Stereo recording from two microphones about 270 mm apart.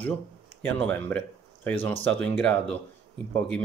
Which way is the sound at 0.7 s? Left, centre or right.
Centre.